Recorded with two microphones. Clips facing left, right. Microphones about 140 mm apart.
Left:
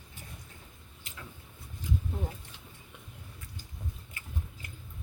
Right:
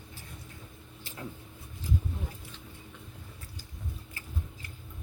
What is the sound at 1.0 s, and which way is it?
Vehicle, 35° right (ahead or behind).